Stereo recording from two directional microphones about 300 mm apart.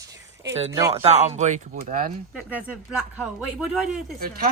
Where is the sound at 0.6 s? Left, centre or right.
Centre.